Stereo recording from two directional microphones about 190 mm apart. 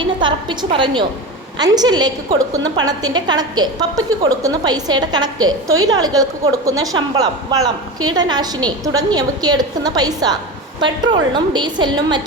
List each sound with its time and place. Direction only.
0.2 s a woman's voice: 25° right (ahead or behind)